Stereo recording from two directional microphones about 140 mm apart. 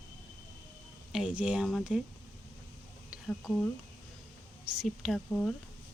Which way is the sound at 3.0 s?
Centre (ahead or behind).